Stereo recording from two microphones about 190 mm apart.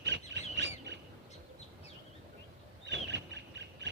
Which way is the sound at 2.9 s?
70° right (ahead or behind).